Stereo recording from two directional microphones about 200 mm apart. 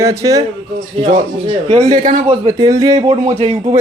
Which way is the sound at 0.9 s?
25° right (ahead or behind).